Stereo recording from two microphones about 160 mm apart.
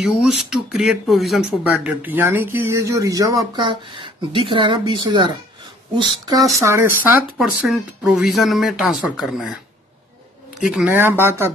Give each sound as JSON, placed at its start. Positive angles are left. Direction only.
{"t": 0.0, "sound": "speech", "side_deg": -5}
{"t": 6.6, "sound": "speech", "side_deg": -15}
{"t": 7.3, "sound": "speech", "side_deg": 0}
{"t": 10.6, "sound": "speech", "side_deg": -5}